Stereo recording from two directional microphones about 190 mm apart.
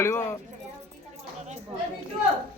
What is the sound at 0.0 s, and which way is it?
Speech, 10° left (ahead or behind).